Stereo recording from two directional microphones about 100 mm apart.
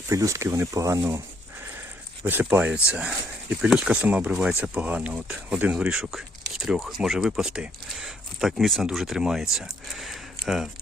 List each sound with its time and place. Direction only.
0.1 s speech: 30° right (ahead or behind)
2.2 s speech: 20° right (ahead or behind); by 10.7 s 5° right (ahead or behind)